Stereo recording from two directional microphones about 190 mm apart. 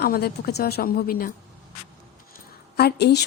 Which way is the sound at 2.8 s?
60° left (ahead or behind).